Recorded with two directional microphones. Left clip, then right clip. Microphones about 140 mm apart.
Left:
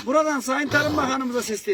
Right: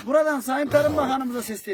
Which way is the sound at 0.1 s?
30° right (ahead or behind).